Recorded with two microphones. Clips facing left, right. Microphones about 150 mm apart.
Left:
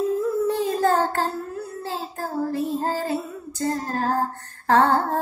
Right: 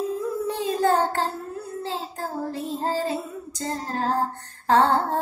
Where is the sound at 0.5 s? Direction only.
15° right (ahead or behind).